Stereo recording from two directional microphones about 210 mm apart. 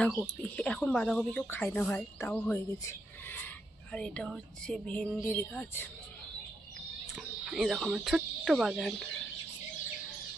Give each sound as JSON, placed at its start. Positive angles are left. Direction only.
{"t": 0.0, "sound": "speech", "side_deg": 5}
{"t": 7.4, "sound": "speech", "side_deg": 0}